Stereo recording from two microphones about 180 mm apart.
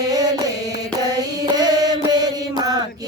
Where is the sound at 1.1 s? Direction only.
20° right (ahead or behind).